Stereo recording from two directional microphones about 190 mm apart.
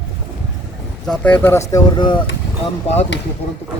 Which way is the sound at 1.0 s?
10° left (ahead or behind).